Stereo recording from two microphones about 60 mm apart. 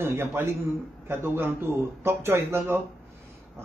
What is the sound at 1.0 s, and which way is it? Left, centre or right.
Speech, right.